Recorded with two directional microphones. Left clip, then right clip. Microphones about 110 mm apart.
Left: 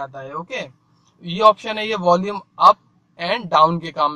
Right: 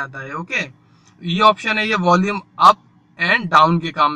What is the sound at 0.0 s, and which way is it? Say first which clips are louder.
A man's voice: right 2 dB; 15° left (ahead or behind).